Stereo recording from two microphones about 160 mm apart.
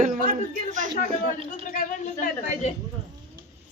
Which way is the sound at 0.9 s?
60° left (ahead or behind).